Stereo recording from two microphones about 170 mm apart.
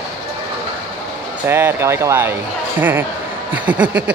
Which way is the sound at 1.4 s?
10° right (ahead or behind).